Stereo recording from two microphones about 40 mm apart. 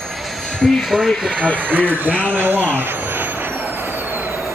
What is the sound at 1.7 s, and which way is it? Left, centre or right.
Speech, right.